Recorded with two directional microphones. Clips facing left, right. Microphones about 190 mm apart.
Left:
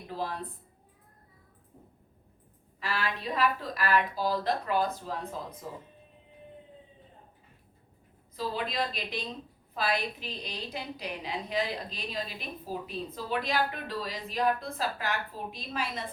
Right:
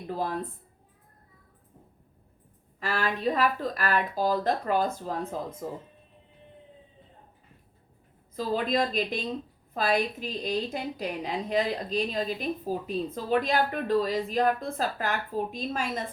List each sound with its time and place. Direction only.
0.1 s a woman's voice: 45° right (ahead or behind)
2.8 s a woman's voice: 45° right (ahead or behind)
8.4 s a woman's voice: 45° right (ahead or behind)